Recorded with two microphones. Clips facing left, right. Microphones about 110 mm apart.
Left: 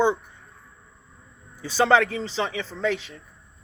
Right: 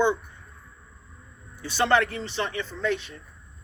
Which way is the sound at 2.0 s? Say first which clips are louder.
Left 3 dB; 90° left.